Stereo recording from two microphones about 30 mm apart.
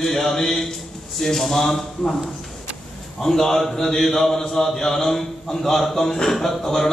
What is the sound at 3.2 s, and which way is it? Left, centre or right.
A man's voice, centre.